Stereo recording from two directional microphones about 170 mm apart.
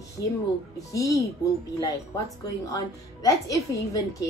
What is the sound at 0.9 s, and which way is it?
Speech, 20° left (ahead or behind).